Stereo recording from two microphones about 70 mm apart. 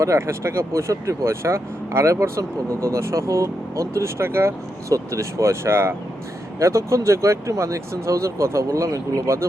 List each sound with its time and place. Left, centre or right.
0.0 s speech: right